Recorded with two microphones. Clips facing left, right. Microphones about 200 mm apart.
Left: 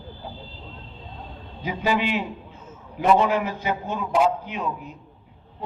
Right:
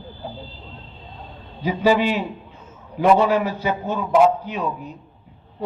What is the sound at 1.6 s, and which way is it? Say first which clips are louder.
Speech: right 6 dB; 35° right (ahead or behind).